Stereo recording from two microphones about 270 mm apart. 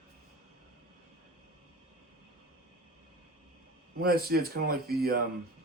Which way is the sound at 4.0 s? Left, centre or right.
Right.